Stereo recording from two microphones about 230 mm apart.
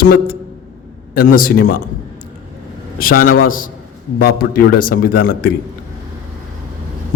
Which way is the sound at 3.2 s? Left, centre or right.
Left.